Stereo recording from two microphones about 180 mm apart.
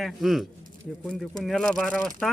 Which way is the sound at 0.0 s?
Centre (ahead or behind).